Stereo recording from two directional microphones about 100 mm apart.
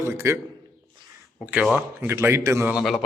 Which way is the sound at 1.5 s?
10° right (ahead or behind).